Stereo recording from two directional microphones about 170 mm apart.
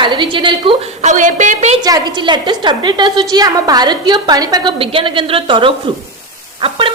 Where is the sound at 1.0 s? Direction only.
45° right (ahead or behind).